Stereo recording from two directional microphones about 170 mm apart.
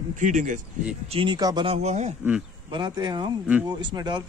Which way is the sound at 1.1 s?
30° right (ahead or behind).